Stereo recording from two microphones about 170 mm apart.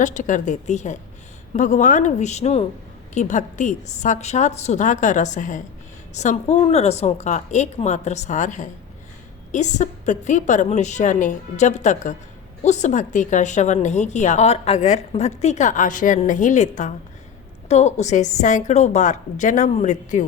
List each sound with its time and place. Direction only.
0.0 s a woman's voice: 45° left (ahead or behind)